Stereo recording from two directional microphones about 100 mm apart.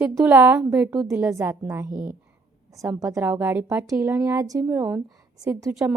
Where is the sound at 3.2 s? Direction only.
20° right (ahead or behind).